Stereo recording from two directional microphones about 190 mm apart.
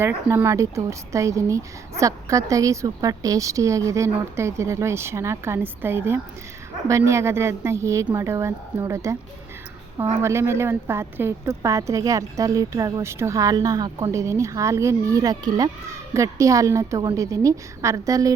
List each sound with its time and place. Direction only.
0.0 s a woman's voice: 15° right (ahead or behind)